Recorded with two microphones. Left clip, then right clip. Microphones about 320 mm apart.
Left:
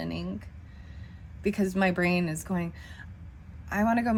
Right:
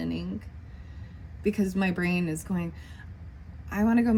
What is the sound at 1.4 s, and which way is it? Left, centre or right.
Speech, left.